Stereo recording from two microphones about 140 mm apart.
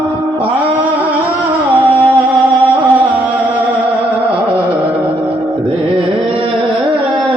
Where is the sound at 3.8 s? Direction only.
10° right (ahead or behind).